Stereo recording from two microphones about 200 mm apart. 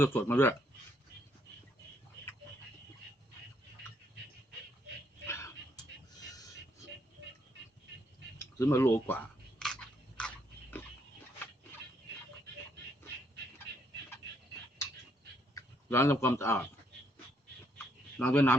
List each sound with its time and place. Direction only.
0.0 s speech: 10° left (ahead or behind)
5.2 s a sound: 15° left (ahead or behind)
8.4 s chewing: 15° left (ahead or behind)
10.2 s dog: 5° left (ahead or behind)
15.5 s speech: 15° left (ahead or behind)
18.2 s speech: 10° left (ahead or behind)